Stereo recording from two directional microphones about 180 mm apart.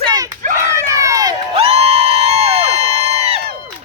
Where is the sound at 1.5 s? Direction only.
35° right (ahead or behind).